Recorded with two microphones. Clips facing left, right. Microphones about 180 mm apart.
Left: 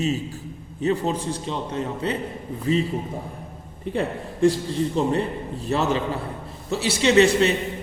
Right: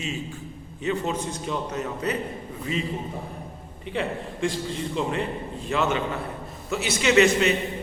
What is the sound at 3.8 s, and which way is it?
A man's voice, 40° left (ahead or behind).